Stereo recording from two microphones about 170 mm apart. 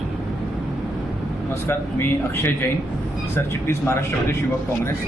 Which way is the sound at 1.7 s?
15° left (ahead or behind).